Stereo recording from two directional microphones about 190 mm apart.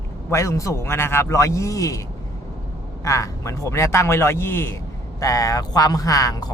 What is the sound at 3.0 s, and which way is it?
A man's voice, 15° left (ahead or behind).